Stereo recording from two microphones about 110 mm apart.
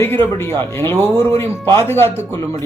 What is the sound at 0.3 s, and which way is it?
A man's voice, 25° left (ahead or behind).